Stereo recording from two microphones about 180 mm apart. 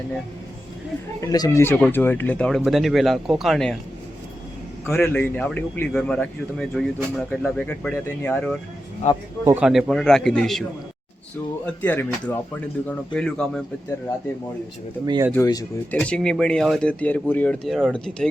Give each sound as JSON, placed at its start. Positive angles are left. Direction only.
{"t": 1.2, "sound": "speech", "side_deg": 20}
{"t": 4.9, "sound": "speech", "side_deg": 10}
{"t": 9.6, "sound": "speech", "side_deg": -5}
{"t": 11.6, "sound": "speech", "side_deg": 10}
{"t": 15.0, "sound": "speech", "side_deg": -20}
{"t": 15.4, "sound": "speech", "side_deg": 20}
{"t": 15.9, "sound": "speech", "side_deg": 5}